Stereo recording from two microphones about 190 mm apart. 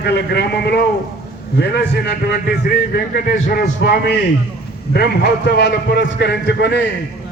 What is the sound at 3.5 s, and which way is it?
A man's voice, 50° left (ahead or behind).